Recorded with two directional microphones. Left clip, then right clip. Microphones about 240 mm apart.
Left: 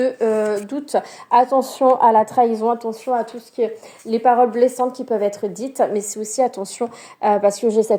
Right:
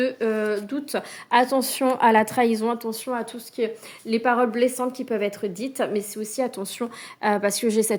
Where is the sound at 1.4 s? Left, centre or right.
Right.